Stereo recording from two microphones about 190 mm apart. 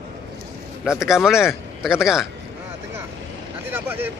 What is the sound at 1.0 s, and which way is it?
A man's voice, centre (ahead or behind).